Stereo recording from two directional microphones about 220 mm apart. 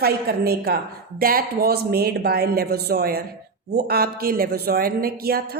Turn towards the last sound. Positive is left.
turn(degrees=-45)  # may be behind; listen again after turning